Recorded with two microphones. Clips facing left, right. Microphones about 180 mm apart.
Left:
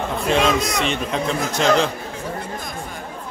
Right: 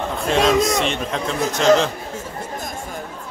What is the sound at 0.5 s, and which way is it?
A man's voice, centre (ahead or behind).